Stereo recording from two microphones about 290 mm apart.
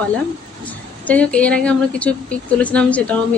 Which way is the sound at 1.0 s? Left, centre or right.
Centre.